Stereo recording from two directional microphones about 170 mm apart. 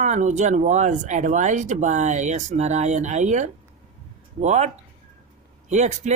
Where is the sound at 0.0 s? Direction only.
45° right (ahead or behind).